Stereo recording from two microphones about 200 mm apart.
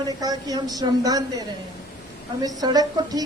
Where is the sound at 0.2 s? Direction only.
20° right (ahead or behind).